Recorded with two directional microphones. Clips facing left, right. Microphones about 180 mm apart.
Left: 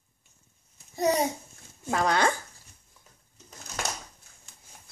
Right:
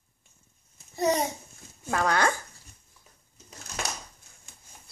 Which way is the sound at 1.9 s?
15° left (ahead or behind).